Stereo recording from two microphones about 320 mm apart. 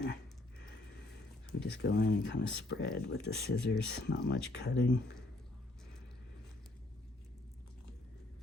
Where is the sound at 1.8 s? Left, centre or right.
Left.